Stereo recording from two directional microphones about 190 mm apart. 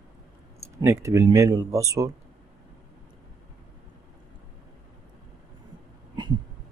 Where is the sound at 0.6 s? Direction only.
15° right (ahead or behind).